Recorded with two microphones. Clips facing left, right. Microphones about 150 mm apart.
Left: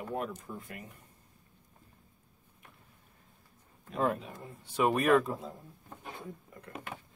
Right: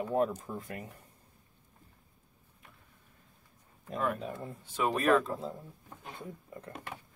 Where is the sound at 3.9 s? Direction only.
30° left (ahead or behind).